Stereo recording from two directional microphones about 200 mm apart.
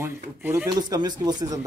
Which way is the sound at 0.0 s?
10° right (ahead or behind).